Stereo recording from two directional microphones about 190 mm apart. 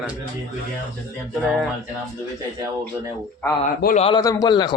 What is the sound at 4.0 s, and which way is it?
Speech, 25° left (ahead or behind).